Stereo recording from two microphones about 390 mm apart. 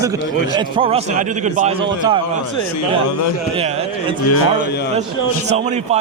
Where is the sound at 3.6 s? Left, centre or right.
Centre.